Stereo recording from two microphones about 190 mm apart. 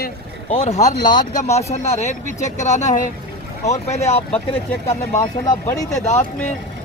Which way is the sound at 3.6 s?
35° left (ahead or behind).